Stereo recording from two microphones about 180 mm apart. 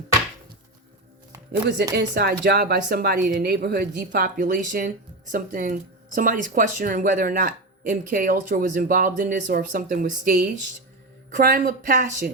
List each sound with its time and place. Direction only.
2.0 s speech: 70° right (ahead or behind)
4.4 s speech: 50° right (ahead or behind)